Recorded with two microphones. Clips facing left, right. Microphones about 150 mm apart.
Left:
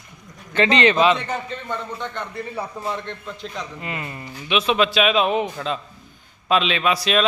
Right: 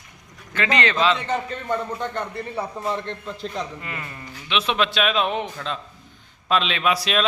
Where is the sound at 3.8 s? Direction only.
20° left (ahead or behind).